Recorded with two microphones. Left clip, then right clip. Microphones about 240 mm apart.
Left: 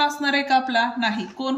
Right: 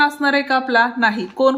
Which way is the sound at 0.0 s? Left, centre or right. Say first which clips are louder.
Right 5 dB; centre.